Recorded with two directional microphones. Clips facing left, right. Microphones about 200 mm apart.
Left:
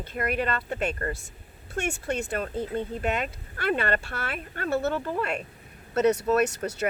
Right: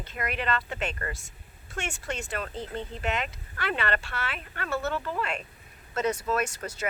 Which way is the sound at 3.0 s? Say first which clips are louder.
Left 3 dB; 45° left (ahead or behind).